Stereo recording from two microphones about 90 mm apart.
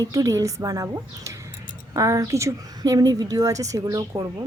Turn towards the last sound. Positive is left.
turn(degrees=-40)  # may be behind; listen again after turning